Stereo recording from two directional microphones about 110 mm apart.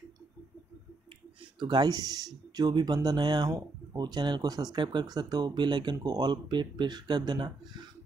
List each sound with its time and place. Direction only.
1.4 s speech: 45° right (ahead or behind)